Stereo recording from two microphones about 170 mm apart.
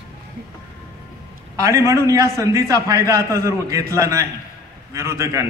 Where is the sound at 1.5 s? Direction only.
20° right (ahead or behind).